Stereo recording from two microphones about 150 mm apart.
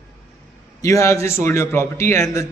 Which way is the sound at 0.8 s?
20° left (ahead or behind).